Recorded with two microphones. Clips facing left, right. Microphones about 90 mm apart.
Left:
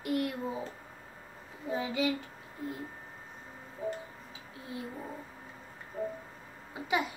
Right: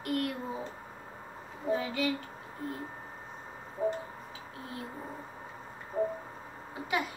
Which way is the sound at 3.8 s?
40° right (ahead or behind).